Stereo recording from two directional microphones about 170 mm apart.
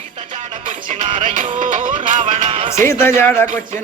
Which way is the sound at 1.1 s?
45° right (ahead or behind).